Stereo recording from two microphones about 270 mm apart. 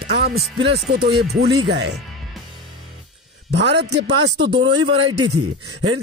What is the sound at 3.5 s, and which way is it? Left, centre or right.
A man's voice, right.